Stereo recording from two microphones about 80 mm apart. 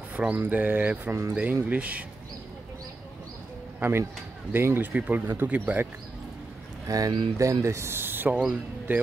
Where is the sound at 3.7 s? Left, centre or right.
Right.